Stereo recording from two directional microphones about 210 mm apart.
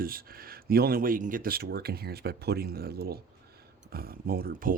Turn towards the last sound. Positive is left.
turn(degrees=-40)  # may be behind; listen again after turning